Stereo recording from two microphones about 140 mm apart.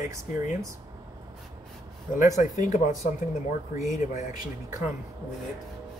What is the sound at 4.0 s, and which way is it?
Speech, 65° left (ahead or behind).